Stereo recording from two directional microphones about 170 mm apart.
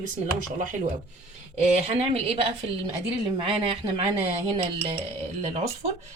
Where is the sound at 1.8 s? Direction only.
35° right (ahead or behind).